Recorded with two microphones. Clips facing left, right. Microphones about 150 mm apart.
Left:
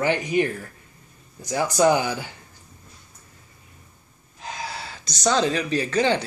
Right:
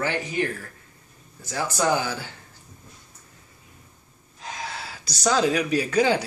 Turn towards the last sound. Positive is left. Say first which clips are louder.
# right 1 dB
turn(degrees=-10)  # may be behind; listen again after turning